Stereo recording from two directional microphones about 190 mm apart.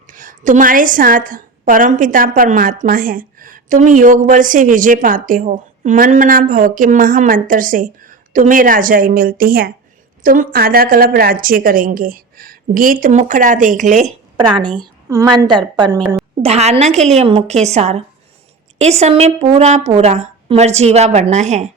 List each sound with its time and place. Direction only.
0.1 s a woman's voice: 45° right (ahead or behind)
14.6 s a woman's voice: 25° right (ahead or behind)
16.4 s a woman's voice: 35° right (ahead or behind)